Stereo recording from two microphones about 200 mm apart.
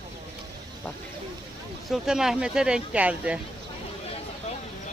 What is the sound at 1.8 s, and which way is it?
Speech, centre (ahead or behind).